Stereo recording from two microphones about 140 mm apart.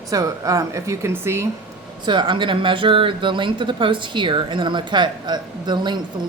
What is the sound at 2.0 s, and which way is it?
Speech, 35° right (ahead or behind).